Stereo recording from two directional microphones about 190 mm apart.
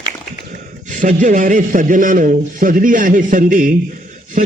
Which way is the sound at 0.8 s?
40° right (ahead or behind).